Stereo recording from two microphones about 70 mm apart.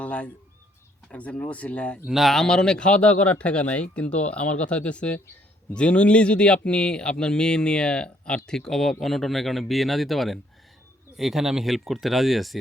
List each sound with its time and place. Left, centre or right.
0.0 s speech: centre
2.0 s speech: centre